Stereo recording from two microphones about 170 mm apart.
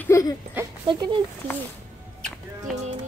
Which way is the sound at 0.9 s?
25° right (ahead or behind).